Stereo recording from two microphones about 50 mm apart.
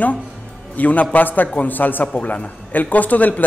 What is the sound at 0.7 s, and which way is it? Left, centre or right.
A man's voice, left.